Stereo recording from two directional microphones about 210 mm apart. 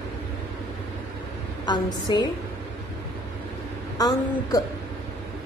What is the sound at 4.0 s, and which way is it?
Speech, 15° left (ahead or behind).